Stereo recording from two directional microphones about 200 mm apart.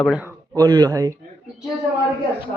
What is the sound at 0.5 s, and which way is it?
Speech, 20° right (ahead or behind).